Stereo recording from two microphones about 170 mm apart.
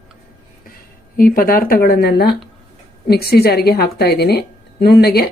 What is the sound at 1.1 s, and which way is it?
A woman's voice, 60° left (ahead or behind).